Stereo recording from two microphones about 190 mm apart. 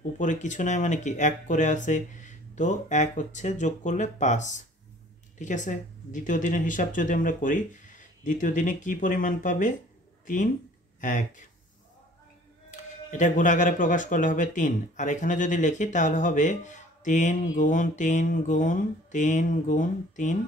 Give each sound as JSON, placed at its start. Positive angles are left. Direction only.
{"t": 0.2, "sound": "speech", "side_deg": 40}
{"t": 13.1, "sound": "speech", "side_deg": 40}